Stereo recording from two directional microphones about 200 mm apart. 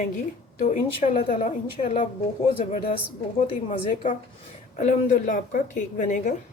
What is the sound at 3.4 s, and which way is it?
A woman's voice, 35° left (ahead or behind).